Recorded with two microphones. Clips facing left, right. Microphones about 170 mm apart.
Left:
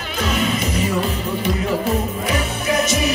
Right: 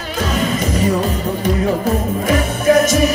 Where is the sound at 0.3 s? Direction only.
40° right (ahead or behind).